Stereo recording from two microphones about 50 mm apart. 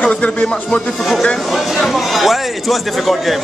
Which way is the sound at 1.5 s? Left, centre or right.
Centre.